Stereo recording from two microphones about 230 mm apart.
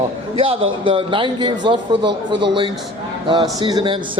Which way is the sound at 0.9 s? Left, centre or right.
Right.